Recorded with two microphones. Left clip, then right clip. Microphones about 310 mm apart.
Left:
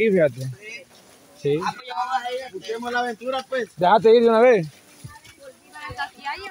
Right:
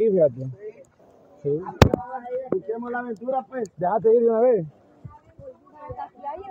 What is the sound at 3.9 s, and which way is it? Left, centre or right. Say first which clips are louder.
Speech: left 5 dB; left.